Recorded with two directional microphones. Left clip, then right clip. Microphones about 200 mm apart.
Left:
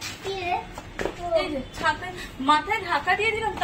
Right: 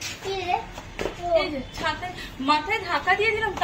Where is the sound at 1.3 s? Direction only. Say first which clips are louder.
Right 3 dB; centre (ahead or behind).